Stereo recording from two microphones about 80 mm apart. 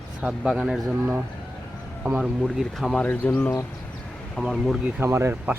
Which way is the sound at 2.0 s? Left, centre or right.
Centre.